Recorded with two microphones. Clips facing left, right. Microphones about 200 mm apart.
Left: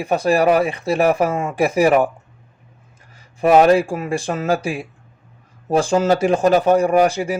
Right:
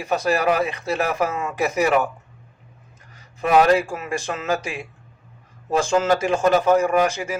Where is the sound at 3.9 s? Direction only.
30° left (ahead or behind).